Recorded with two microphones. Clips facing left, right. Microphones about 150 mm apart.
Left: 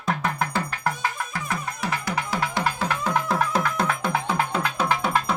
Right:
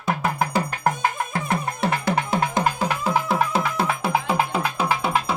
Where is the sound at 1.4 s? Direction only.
30° right (ahead or behind).